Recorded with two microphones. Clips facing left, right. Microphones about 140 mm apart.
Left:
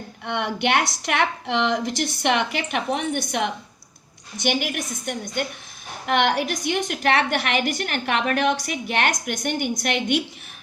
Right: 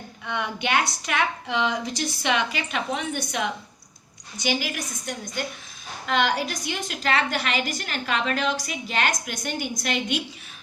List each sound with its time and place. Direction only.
0.3 s a woman's voice: 65° left (ahead or behind)